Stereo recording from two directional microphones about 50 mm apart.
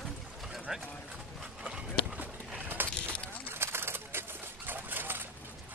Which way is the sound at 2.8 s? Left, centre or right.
Right.